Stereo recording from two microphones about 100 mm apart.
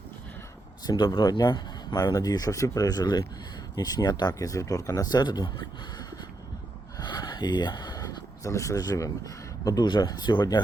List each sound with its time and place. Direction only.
0.9 s speech: 50° left (ahead or behind)
2.1 s speech: 35° left (ahead or behind)